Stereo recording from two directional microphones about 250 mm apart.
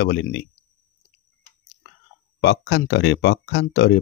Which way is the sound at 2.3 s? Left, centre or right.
Left.